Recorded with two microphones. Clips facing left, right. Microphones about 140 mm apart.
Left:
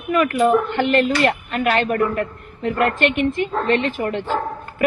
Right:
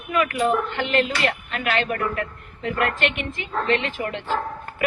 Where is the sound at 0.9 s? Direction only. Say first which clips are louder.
Left 5 dB; 45° left (ahead or behind).